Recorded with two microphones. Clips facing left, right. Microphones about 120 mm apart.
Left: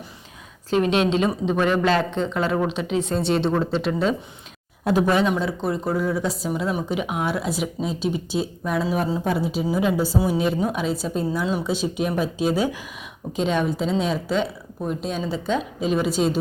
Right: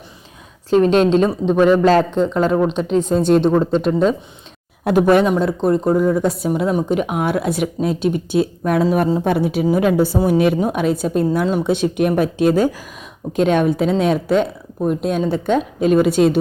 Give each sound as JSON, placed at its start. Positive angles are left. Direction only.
{"t": 0.7, "sound": "a woman's voice", "side_deg": -40}
{"t": 2.0, "sound": "speech", "side_deg": -5}
{"t": 3.2, "sound": "speech", "side_deg": -45}
{"t": 4.9, "sound": "speech", "side_deg": -60}
{"t": 9.2, "sound": "speech", "side_deg": -65}
{"t": 13.3, "sound": "speech", "side_deg": -55}